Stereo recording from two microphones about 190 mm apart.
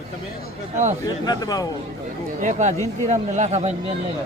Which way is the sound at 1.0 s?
20° left (ahead or behind).